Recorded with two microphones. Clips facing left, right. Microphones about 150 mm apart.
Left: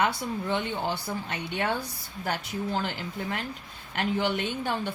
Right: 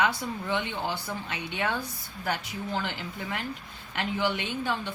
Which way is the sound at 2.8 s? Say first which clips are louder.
Left 2 dB; 45° left (ahead or behind).